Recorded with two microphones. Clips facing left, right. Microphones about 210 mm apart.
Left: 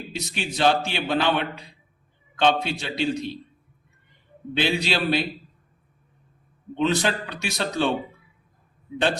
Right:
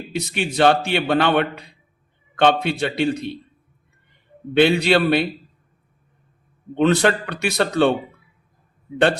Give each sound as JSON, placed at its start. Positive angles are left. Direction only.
{"t": 0.1, "sound": "a man's voice", "side_deg": -55}
{"t": 4.5, "sound": "a man's voice", "side_deg": -60}
{"t": 6.7, "sound": "a man's voice", "side_deg": -60}